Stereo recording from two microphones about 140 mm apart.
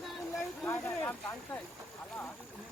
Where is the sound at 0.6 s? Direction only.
15° left (ahead or behind).